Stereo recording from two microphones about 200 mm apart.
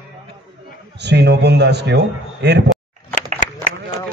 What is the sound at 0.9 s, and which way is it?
Speech, 60° right (ahead or behind).